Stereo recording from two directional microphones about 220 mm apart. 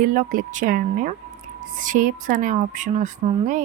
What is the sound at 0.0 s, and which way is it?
A woman's voice, 40° right (ahead or behind).